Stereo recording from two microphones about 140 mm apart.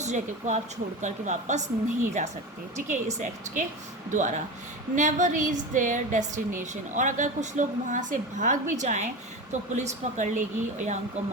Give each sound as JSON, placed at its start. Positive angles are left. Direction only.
{"t": 0.0, "sound": "a woman's voice", "side_deg": -55}
{"t": 4.1, "sound": "a woman's voice", "side_deg": -60}